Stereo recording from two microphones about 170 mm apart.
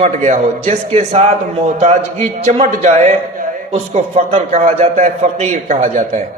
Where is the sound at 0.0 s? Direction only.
45° right (ahead or behind).